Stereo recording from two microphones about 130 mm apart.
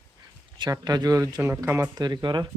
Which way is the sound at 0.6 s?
30° right (ahead or behind).